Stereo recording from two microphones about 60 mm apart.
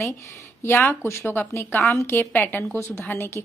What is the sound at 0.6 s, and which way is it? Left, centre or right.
Speech, left.